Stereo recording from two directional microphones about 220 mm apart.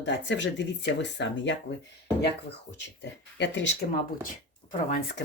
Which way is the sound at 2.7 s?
55° left (ahead or behind).